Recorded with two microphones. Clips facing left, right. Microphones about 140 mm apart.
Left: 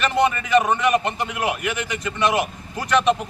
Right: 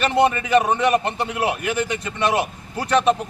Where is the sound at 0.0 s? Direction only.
30° right (ahead or behind).